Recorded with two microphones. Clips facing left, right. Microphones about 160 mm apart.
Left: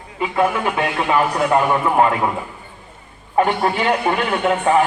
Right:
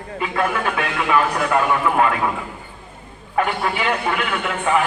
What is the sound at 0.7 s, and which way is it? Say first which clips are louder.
A man's voice: even; 30° left (ahead or behind).